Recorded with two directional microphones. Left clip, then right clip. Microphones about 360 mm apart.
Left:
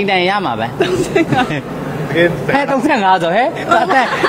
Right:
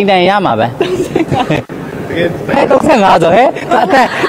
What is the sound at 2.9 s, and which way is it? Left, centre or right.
Speech, right.